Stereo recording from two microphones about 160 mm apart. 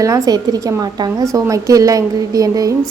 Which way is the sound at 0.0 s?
20° right (ahead or behind).